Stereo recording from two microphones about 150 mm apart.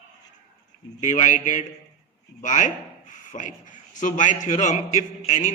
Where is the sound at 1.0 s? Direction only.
55° left (ahead or behind).